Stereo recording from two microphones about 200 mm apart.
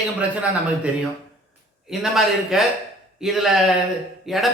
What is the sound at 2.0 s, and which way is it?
A man's voice, centre (ahead or behind).